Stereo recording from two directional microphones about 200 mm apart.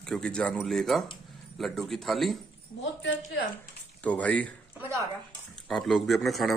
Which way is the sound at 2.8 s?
65° left (ahead or behind).